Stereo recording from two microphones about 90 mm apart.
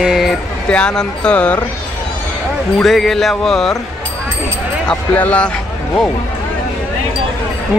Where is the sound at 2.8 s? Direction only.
Centre (ahead or behind).